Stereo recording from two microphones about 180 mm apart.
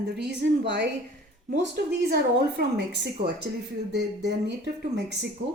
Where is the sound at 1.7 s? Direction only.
60° right (ahead or behind).